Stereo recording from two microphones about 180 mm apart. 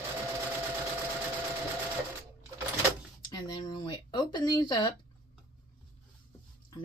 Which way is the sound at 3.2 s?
25° left (ahead or behind).